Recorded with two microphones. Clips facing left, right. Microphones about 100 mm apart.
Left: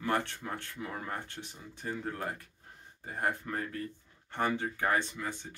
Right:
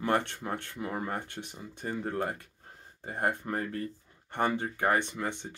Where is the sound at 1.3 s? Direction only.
55° right (ahead or behind).